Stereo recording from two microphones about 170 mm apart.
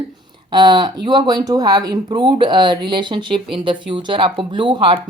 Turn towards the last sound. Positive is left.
turn(degrees=-30)  # may be behind; listen again after turning